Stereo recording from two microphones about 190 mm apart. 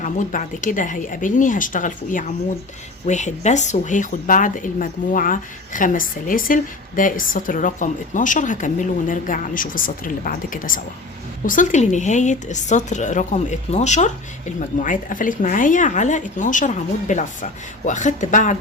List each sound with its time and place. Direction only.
0.0 s speech: 40° left (ahead or behind)